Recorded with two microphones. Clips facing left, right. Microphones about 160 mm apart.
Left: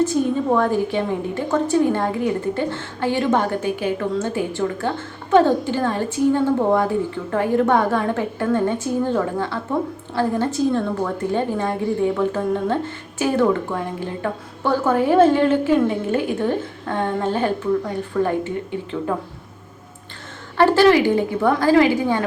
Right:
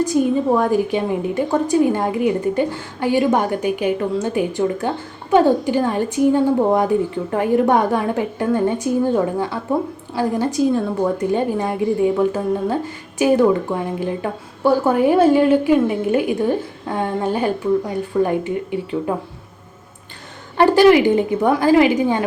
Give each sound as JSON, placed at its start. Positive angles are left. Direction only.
{"t": 0.0, "sound": "a woman's voice", "side_deg": -15}
{"t": 20.6, "sound": "a woman's voice", "side_deg": -15}